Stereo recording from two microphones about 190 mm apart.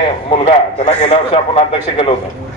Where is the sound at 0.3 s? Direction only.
35° left (ahead or behind).